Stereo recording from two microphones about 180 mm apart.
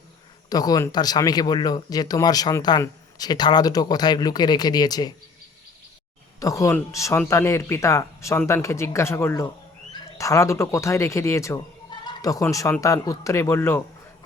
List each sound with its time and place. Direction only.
0.5 s speech: 20° left (ahead or behind)
6.4 s speech: 15° left (ahead or behind)